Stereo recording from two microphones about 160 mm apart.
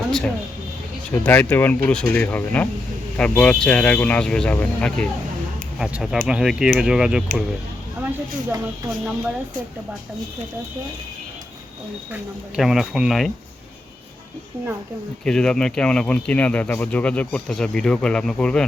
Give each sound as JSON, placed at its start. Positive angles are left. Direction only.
{"t": 1.1, "sound": "speech", "side_deg": 10}
{"t": 8.4, "sound": "speech", "side_deg": -20}
{"t": 12.1, "sound": "speech", "side_deg": -5}
{"t": 15.2, "sound": "speech", "side_deg": 5}